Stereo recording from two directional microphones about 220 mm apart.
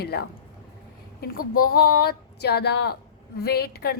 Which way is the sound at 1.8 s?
45° left (ahead or behind).